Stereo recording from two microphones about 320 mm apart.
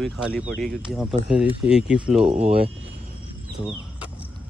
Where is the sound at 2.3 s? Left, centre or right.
Centre.